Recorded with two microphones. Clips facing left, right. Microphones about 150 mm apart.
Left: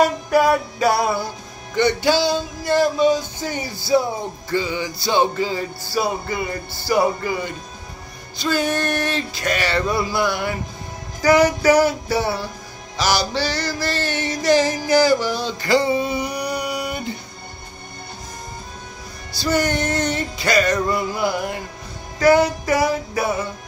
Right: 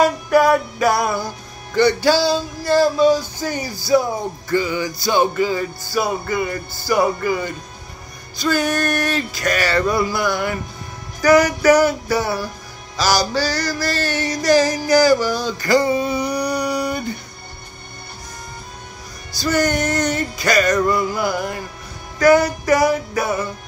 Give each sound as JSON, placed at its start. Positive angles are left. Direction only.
{"t": 0.3, "sound": "music", "side_deg": 30}
{"t": 16.3, "sound": "music", "side_deg": -40}
{"t": 19.3, "sound": "music", "side_deg": 25}